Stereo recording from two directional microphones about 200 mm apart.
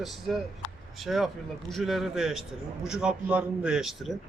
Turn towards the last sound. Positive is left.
turn(degrees=0)  # may be behind; listen again after turning